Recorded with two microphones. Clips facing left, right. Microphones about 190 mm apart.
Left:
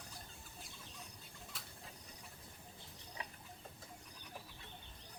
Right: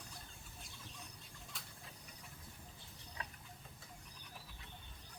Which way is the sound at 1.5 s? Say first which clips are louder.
Right 1 dB; centre (ahead or behind).